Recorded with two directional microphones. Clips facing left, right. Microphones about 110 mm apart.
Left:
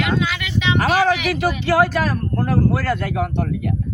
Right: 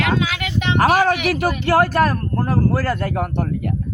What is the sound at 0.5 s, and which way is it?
Speech, 50° right (ahead or behind).